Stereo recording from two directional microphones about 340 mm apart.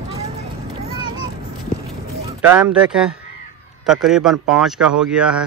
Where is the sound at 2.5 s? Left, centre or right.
Centre.